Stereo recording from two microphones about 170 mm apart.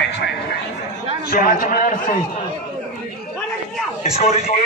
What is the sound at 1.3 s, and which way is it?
Speech, 55° left (ahead or behind).